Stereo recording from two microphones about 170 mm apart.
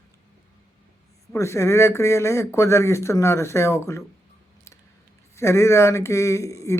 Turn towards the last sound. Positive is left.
turn(degrees=15)  # may be behind; listen again after turning